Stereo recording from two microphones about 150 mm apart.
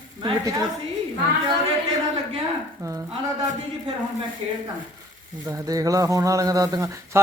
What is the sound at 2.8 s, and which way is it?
Speech, 20° right (ahead or behind).